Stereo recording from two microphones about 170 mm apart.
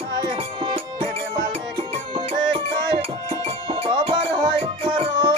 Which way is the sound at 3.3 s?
30° right (ahead or behind).